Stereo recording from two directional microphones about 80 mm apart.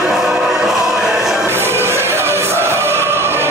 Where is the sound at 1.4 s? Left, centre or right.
Right.